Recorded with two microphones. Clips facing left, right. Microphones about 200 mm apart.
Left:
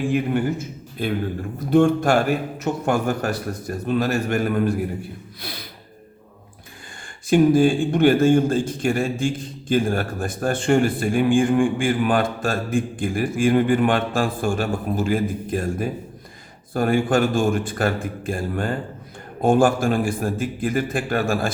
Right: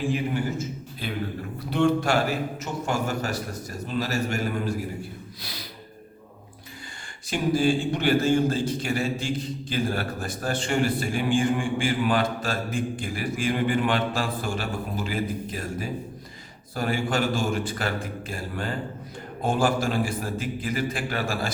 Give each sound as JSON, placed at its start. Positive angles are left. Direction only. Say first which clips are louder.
{"t": 0.1, "sound": "a man's voice", "louder": "left 5 dB", "side_deg": 55}
{"t": 7.3, "sound": "a man's voice", "louder": "left 8 dB", "side_deg": 50}